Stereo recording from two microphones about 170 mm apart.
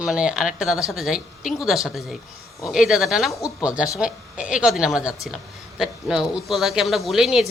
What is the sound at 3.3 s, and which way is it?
Speech, 20° left (ahead or behind).